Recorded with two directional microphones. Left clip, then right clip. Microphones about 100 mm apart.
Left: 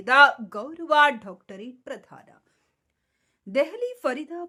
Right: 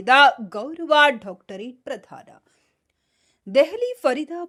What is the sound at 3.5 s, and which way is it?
Speech, 40° right (ahead or behind).